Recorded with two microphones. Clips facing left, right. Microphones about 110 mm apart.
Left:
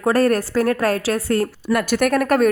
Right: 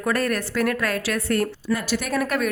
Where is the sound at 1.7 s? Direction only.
65° left (ahead or behind).